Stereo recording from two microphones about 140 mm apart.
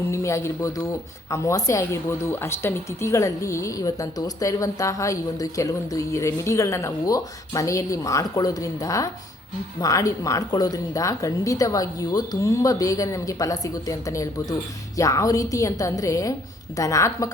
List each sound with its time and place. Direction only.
0.1 s a woman's voice: 20° left (ahead or behind)